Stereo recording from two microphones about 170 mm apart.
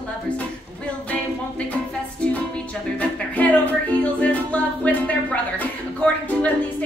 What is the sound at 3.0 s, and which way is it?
Music, 10° left (ahead or behind).